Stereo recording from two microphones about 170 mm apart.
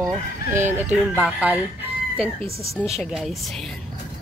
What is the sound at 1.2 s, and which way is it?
Speech, 5° right (ahead or behind).